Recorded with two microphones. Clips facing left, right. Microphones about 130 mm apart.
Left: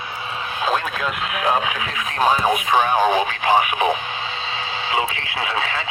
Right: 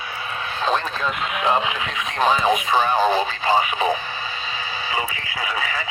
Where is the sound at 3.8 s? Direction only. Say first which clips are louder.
Left 2 dB; 20° left (ahead or behind).